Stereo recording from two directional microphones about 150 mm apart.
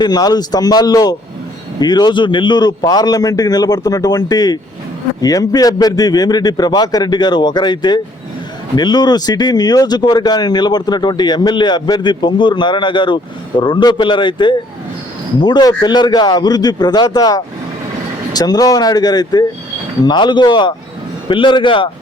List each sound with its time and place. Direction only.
0.0 s a man's voice: 25° left (ahead or behind)